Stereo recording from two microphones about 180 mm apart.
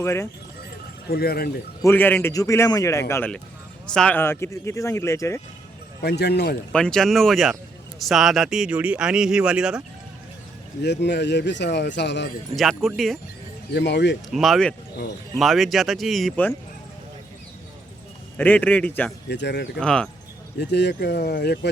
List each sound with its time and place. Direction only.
0.0 s speech: 15° left (ahead or behind)
1.0 s speech: 60° left (ahead or behind)
1.8 s speech: 10° left (ahead or behind)
6.0 s speech: 65° left (ahead or behind)
6.7 s speech: 5° left (ahead or behind)
10.8 s a man's voice: 70° left (ahead or behind)
12.5 s speech: centre (ahead or behind)
13.7 s a man's voice: 75° left (ahead or behind)
14.3 s speech: centre (ahead or behind)
18.3 s speech: 10° left (ahead or behind)
19.3 s a man's voice: 70° left (ahead or behind)
19.8 s speech: 5° left (ahead or behind)
20.6 s a man's voice: 70° left (ahead or behind)